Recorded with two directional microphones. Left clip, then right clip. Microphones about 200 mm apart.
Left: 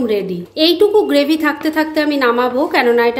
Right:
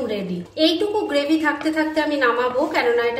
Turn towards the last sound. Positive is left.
turn(degrees=40)  # may be behind; listen again after turning